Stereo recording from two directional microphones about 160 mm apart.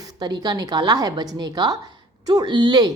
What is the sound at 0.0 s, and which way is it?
A woman's voice, 25° right (ahead or behind).